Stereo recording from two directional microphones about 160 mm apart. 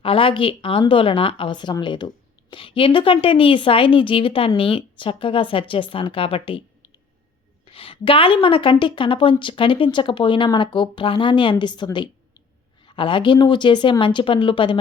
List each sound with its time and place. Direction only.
0.0 s a woman's voice: 35° left (ahead or behind)